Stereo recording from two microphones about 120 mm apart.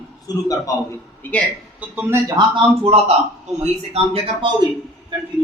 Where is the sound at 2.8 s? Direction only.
60° right (ahead or behind).